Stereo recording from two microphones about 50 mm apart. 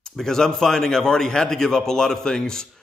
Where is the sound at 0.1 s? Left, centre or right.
Centre.